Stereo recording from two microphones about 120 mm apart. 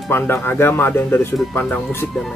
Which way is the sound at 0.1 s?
20° left (ahead or behind).